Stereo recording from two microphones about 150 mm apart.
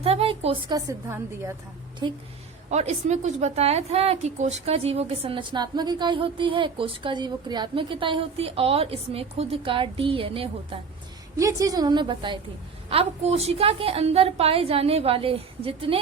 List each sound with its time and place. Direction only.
0.0 s a woman's voice: 40° right (ahead or behind)
0.9 s a woman's voice: 15° right (ahead or behind)
2.0 s a woman's voice: 30° right (ahead or behind)
2.6 s a woman's voice: 50° right (ahead or behind)
11.3 s a woman's voice: 20° right (ahead or behind)
12.9 s a woman's voice: 40° right (ahead or behind)